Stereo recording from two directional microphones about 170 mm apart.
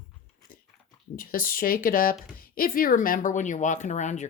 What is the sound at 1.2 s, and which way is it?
A woman's voice, 60° left (ahead or behind).